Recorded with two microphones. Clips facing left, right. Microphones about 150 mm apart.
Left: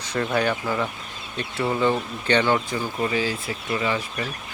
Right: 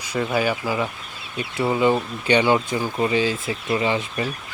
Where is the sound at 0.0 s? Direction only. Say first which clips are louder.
Right 1 dB; 10° right (ahead or behind).